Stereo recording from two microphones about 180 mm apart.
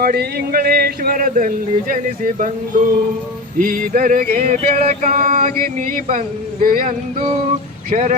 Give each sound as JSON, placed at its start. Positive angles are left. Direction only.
{"t": 0.0, "sound": "speech", "side_deg": -60}
{"t": 3.6, "sound": "a sound", "side_deg": -50}
{"t": 7.9, "sound": "speech", "side_deg": -40}